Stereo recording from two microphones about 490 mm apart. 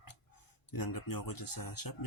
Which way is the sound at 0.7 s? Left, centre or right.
Left.